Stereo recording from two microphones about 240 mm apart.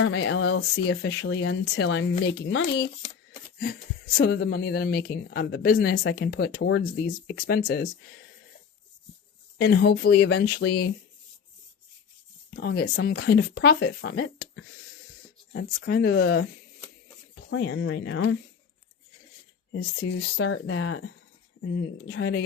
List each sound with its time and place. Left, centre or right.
0.0 s speech: left
4.2 s speech: left
9.6 s speech: left
12.5 s speech: left
17.5 s speech: left
19.7 s speech: left